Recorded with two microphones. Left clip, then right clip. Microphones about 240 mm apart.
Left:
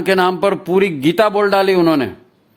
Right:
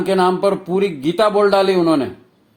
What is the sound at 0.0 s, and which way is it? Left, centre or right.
A man's voice, left.